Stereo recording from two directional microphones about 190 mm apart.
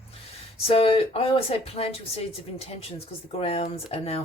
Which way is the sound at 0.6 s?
30° left (ahead or behind).